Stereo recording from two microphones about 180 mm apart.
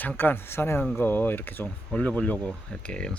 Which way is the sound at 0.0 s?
10° left (ahead or behind).